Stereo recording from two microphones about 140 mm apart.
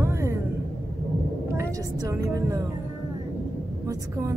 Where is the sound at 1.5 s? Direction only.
20° right (ahead or behind).